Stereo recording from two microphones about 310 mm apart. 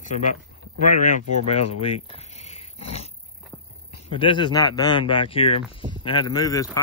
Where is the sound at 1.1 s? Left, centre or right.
Centre.